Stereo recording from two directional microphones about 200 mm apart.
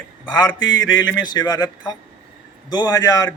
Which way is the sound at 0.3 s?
20° left (ahead or behind).